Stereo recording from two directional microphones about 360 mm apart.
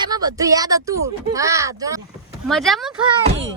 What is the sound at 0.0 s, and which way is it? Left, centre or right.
A woman's voice, centre.